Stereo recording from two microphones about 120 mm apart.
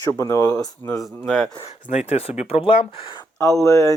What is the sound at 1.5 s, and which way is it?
Speech, 60° left (ahead or behind).